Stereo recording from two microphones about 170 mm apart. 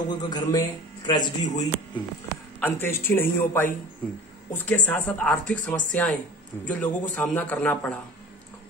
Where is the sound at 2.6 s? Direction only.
15° left (ahead or behind).